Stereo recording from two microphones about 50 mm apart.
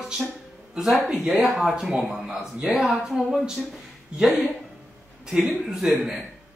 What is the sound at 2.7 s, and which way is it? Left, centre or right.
Speech, centre.